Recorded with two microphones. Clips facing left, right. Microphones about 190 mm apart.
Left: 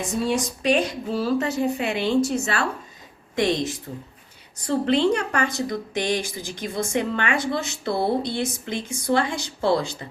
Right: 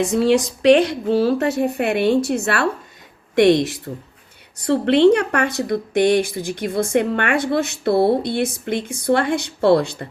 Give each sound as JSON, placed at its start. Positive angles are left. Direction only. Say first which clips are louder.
{"t": 0.0, "sound": "speech", "louder": "right 8 dB", "side_deg": -75}